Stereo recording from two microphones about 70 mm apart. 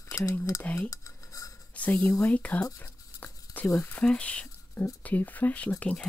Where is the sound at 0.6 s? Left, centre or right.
Left.